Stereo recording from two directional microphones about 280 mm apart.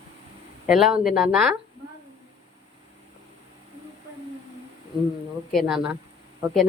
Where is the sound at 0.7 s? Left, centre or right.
Centre.